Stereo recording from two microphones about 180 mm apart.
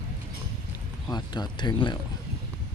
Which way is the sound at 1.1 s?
25° left (ahead or behind).